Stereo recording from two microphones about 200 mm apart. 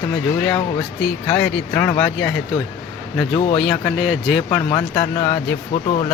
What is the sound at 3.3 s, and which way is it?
Speech, 30° left (ahead or behind).